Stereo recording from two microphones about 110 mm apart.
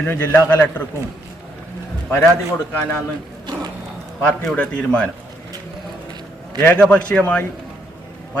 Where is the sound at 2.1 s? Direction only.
25° left (ahead or behind).